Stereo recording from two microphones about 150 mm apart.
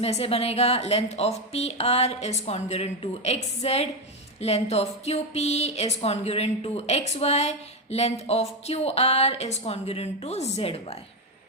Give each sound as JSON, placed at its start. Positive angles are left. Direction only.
{"t": 0.0, "sound": "speech", "side_deg": 40}